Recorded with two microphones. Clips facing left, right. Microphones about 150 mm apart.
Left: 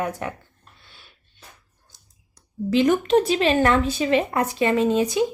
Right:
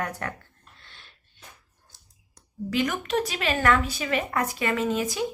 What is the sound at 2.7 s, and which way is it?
A woman's voice, 25° left (ahead or behind).